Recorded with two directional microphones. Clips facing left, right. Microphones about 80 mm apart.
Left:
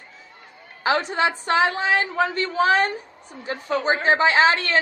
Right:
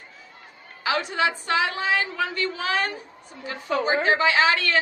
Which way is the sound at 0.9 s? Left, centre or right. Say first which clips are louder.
Left 3 dB; left.